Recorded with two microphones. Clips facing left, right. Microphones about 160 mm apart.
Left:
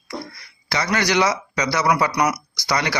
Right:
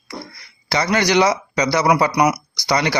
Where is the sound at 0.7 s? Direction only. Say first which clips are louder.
Right 4 dB; 25° right (ahead or behind).